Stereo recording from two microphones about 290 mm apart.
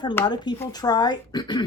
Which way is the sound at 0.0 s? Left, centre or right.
Centre.